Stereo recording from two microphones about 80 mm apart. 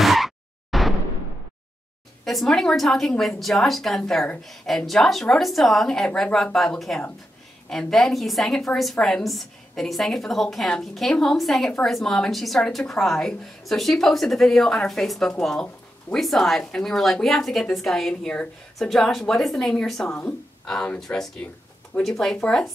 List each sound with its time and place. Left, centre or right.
0.0 s a sound: centre
2.2 s a woman's voice: centre
20.2 s speech: centre